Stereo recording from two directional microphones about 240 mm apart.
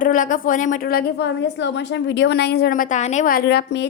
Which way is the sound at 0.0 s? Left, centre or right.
Left.